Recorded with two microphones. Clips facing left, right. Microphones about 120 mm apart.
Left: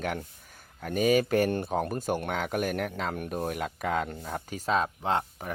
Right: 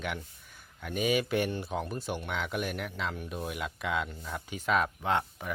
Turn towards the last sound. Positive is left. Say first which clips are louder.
# left 1 dB
turn(degrees=35)  # may be behind; listen again after turning